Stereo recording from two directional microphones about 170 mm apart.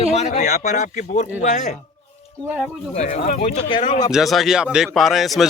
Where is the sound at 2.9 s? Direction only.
45° left (ahead or behind).